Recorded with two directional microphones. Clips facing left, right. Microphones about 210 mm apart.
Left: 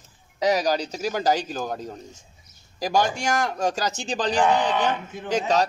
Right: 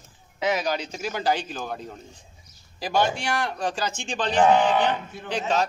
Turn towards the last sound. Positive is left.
turn(degrees=40)  # may be behind; listen again after turning